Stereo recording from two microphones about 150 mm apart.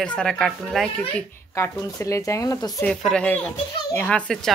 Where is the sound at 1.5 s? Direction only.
20° left (ahead or behind).